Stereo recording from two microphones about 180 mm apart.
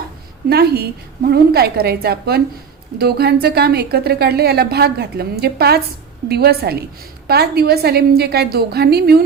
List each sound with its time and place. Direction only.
0.5 s a woman's voice: 65° right (ahead or behind)